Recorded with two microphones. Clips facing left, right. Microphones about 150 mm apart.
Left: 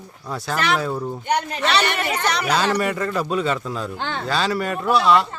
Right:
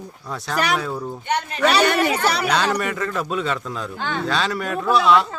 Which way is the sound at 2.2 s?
Centre (ahead or behind).